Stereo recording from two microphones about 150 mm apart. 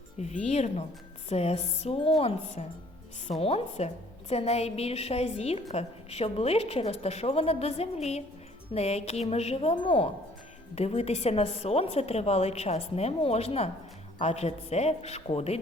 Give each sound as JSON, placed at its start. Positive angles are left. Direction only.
{"t": 0.2, "sound": "a woman's voice", "side_deg": 45}